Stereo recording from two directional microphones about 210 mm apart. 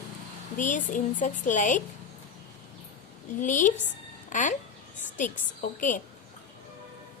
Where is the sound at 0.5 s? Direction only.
40° left (ahead or behind).